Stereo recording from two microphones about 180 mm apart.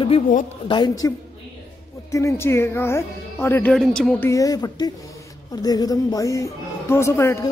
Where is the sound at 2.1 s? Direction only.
15° left (ahead or behind).